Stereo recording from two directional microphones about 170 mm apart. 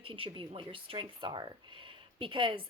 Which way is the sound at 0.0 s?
30° right (ahead or behind).